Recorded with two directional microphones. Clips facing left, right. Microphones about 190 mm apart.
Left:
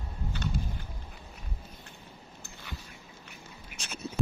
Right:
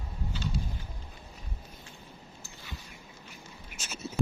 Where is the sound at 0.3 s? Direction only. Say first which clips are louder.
Left 1 dB; 60° left (ahead or behind).